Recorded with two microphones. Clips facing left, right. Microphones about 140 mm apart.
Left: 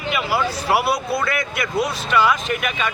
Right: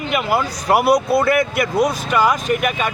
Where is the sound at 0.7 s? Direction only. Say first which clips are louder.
Right 7 dB; 50° right (ahead or behind).